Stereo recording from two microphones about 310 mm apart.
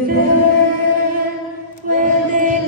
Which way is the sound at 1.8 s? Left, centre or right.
Right.